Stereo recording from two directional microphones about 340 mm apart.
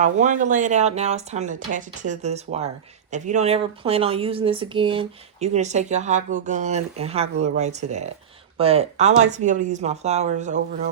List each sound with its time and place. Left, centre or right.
0.0 s speech: right